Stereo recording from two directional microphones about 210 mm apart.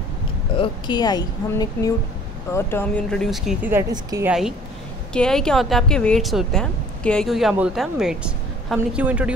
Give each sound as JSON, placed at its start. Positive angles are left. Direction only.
{"t": 0.6, "sound": "a woman's voice", "side_deg": 20}
{"t": 3.9, "sound": "a woman's voice", "side_deg": -15}
{"t": 4.3, "sound": "speech", "side_deg": -5}